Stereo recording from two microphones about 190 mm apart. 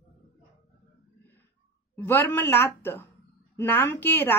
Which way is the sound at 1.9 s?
10° left (ahead or behind).